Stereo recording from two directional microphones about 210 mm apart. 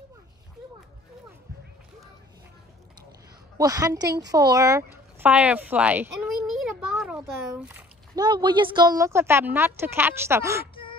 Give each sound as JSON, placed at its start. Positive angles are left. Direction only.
{"t": 3.5, "sound": "a woman's voice", "side_deg": -15}
{"t": 6.6, "sound": "a sound", "side_deg": 0}
{"t": 8.2, "sound": "a woman's voice", "side_deg": -20}